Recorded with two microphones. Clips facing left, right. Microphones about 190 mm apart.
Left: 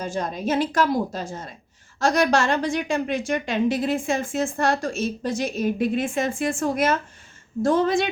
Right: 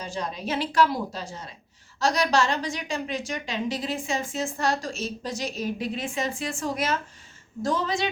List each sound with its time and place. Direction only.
0.0 s a woman's voice: 50° left (ahead or behind)